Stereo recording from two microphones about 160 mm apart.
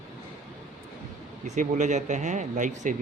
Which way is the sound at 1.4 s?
45° right (ahead or behind).